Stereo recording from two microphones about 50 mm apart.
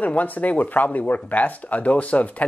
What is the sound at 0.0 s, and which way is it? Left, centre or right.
Speech, left.